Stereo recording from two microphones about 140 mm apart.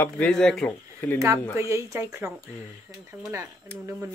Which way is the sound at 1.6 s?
20° right (ahead or behind).